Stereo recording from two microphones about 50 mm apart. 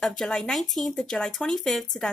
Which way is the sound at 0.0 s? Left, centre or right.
Centre.